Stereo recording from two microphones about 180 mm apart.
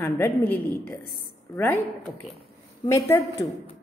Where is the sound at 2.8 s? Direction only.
15° left (ahead or behind).